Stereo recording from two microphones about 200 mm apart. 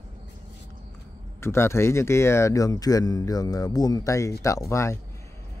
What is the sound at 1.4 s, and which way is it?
Speech, 10° left (ahead or behind).